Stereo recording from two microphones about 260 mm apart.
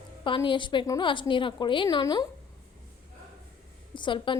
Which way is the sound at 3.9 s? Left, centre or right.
Centre.